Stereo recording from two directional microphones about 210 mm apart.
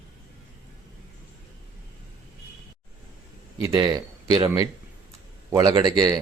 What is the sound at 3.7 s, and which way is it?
A man's voice, 20° right (ahead or behind).